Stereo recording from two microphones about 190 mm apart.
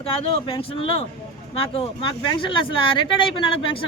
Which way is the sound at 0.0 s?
30° left (ahead or behind).